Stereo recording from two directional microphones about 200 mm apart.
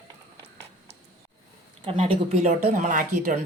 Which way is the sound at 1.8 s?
30° right (ahead or behind).